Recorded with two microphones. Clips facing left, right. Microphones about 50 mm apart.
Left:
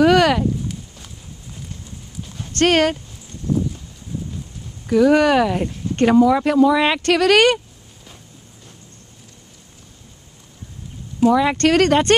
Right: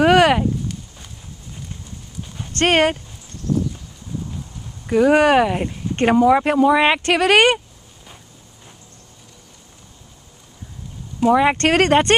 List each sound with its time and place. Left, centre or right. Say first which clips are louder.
0.0 s a sound: right 1 dB; right
0.9 s clip-clop: even; centre
2.6 s speech: even; right
4.8 s speech: even; right
11.3 s speech: right 2 dB; right